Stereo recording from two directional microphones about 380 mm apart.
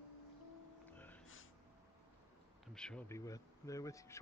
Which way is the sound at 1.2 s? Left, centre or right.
Left.